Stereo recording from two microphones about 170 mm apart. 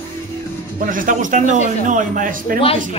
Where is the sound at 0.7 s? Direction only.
50° right (ahead or behind).